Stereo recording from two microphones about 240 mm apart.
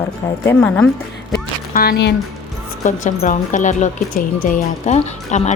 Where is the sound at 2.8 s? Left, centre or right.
Left.